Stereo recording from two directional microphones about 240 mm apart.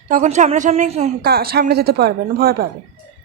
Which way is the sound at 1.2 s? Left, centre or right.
Right.